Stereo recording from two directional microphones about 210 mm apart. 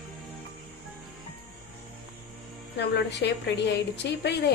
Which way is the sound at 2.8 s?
55° left (ahead or behind).